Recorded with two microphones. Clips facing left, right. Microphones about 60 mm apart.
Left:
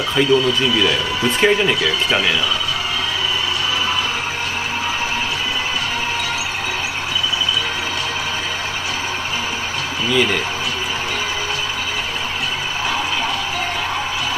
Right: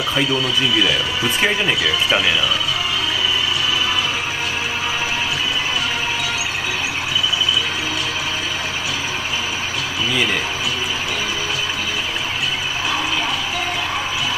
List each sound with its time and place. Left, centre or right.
0.3 s speech: left
0.8 s speech: centre